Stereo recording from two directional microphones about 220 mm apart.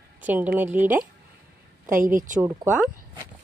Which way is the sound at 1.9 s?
40° right (ahead or behind).